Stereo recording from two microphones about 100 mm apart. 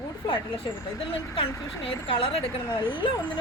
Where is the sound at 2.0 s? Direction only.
65° left (ahead or behind).